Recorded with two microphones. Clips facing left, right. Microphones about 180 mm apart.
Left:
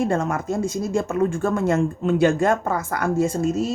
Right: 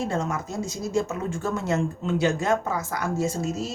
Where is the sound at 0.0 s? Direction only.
55° left (ahead or behind).